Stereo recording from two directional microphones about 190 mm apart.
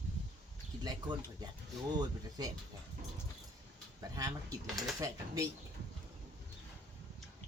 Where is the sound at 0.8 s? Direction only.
20° right (ahead or behind).